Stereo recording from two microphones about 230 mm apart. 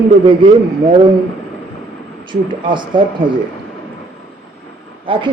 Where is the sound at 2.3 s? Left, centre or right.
Right.